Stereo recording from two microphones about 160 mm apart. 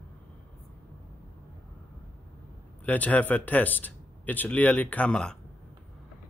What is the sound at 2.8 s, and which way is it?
Speech, 10° left (ahead or behind).